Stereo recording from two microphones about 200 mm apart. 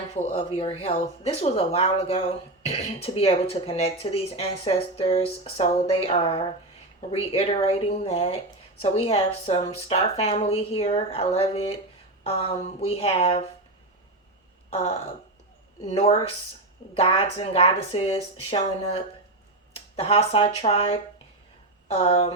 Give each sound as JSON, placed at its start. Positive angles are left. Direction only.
{"t": 0.1, "sound": "speech", "side_deg": 30}
{"t": 14.7, "sound": "throat clearing", "side_deg": 30}
{"t": 15.8, "sound": "a woman's voice", "side_deg": 30}